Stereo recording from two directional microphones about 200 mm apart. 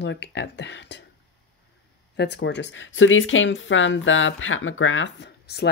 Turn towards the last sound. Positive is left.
turn(degrees=55)  # may be behind; listen again after turning